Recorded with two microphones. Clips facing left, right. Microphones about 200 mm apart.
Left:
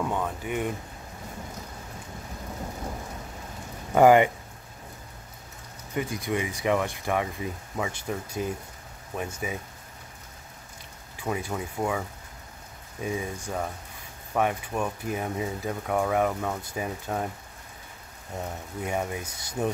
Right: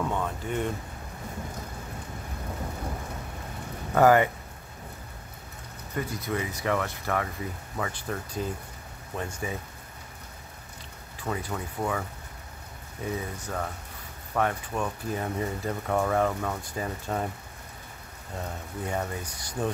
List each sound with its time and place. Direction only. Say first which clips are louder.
0.0 s a sound: left 1 dB; 10° left (ahead or behind)
3.9 s speech: left 2 dB; 15° left (ahead or behind)
5.9 s speech: left 2 dB; 15° left (ahead or behind)
11.2 s speech: left 2 dB; 15° left (ahead or behind)
13.0 s speech: left 2 dB; 10° left (ahead or behind)
18.3 s speech: left 1 dB; 10° left (ahead or behind)